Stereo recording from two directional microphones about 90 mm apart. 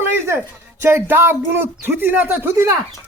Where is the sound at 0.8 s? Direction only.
25° right (ahead or behind).